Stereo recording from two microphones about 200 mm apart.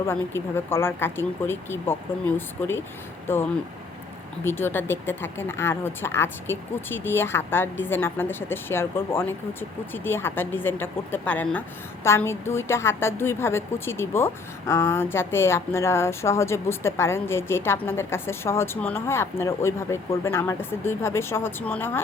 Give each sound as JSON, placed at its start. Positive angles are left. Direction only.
{"t": 0.0, "sound": "speech", "side_deg": 10}